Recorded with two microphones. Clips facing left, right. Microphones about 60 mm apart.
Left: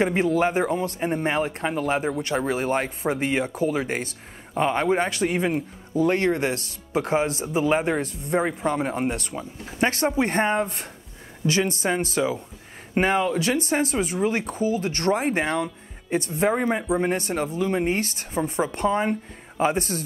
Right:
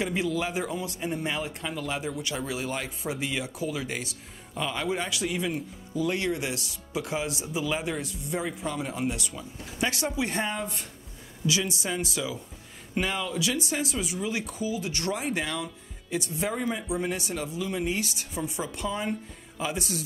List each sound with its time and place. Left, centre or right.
0.0 s speech: left